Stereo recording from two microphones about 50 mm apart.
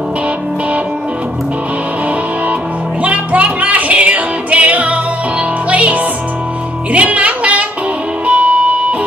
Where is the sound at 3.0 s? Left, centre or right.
Right.